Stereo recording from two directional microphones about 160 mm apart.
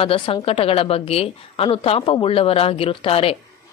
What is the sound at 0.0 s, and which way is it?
A woman's voice, 35° left (ahead or behind).